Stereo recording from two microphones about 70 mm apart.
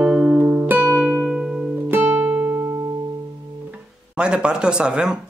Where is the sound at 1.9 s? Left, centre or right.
Right.